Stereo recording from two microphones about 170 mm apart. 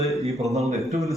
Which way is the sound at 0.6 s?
40° right (ahead or behind).